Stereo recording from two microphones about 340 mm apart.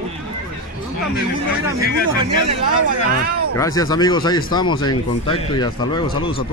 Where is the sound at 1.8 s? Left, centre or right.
Left.